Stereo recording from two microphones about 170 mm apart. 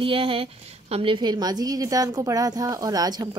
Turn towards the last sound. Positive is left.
turn(degrees=-20)  # may be behind; listen again after turning